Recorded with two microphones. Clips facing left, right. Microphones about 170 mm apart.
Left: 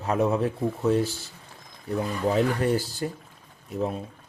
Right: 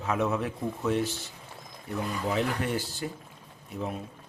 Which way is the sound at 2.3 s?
40° left (ahead or behind).